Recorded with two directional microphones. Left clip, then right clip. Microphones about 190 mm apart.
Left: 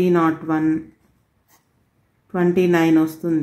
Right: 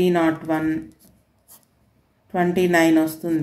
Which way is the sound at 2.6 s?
45° left (ahead or behind).